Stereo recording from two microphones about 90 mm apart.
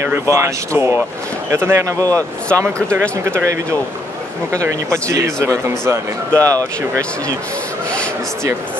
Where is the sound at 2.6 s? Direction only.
25° right (ahead or behind).